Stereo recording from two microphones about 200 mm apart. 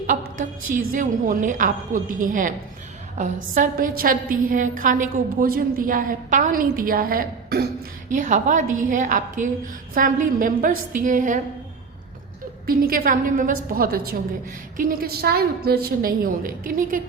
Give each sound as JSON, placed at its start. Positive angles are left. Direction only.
{"t": 0.9, "sound": "a woman's voice", "side_deg": -40}
{"t": 8.1, "sound": "a woman's voice", "side_deg": -40}
{"t": 12.6, "sound": "a woman's voice", "side_deg": -45}